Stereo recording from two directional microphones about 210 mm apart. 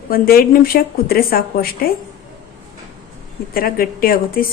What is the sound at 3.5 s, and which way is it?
Speech, 45° left (ahead or behind).